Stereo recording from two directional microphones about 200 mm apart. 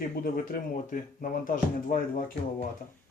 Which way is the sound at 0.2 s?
45° left (ahead or behind).